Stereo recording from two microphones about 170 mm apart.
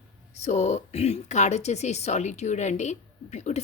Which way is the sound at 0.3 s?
40° left (ahead or behind).